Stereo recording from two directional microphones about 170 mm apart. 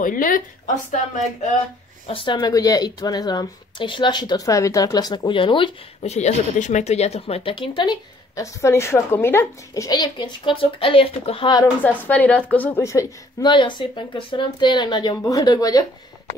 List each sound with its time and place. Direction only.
0.0 s a woman's voice: 50° left (ahead or behind)
2.0 s a woman's voice: 30° left (ahead or behind)
11.8 s a woman's voice: 10° left (ahead or behind)